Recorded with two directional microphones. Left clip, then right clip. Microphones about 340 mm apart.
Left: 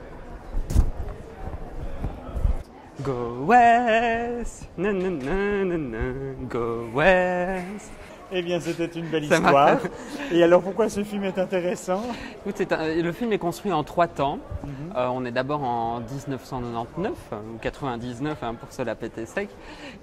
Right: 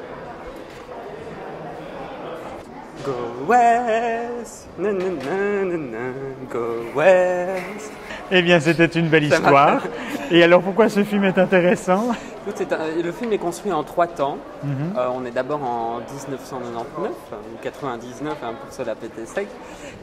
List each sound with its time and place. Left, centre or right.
3.4 s speech: left
4.8 s speech: left
8.3 s speech: right
9.6 s a man's voice: centre
12.5 s speech: left
17.6 s speech: left